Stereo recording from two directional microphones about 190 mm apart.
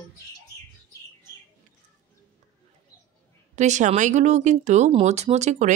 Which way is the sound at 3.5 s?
40° right (ahead or behind).